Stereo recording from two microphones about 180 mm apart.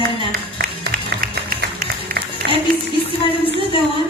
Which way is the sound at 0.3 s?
55° right (ahead or behind).